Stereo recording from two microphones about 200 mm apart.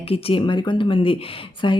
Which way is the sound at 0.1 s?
25° left (ahead or behind).